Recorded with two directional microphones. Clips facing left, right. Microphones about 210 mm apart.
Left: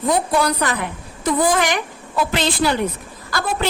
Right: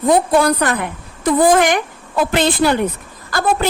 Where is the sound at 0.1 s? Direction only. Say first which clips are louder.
Right 5 dB; 55° right (ahead or behind).